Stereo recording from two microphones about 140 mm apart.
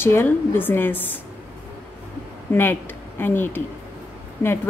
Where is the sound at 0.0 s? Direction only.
15° left (ahead or behind).